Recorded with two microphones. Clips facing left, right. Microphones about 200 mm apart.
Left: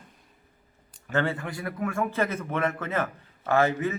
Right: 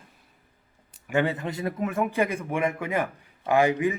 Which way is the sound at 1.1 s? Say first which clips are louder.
Right 2 dB; 15° right (ahead or behind).